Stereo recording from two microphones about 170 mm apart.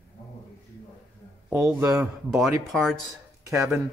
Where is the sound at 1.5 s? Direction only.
15° right (ahead or behind).